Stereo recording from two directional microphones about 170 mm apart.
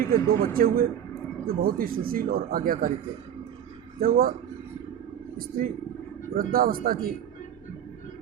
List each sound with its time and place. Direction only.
0.1 s speech: 60° right (ahead or behind)
4.0 s speech: 60° right (ahead or behind)
5.4 s speech: 60° right (ahead or behind)